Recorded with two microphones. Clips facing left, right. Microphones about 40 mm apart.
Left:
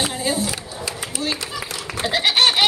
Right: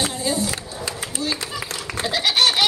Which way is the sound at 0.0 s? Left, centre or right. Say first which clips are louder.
Left 1 dB; centre.